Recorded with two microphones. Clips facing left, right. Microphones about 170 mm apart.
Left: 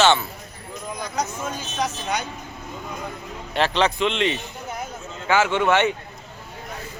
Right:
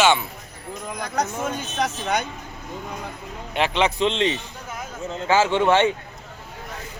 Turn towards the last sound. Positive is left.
turn(degrees=-25)  # may be behind; listen again after turning